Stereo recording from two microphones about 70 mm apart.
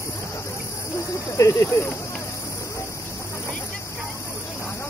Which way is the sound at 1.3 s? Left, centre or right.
Left.